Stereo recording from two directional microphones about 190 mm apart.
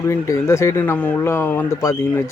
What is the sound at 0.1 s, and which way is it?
Speech, 15° left (ahead or behind).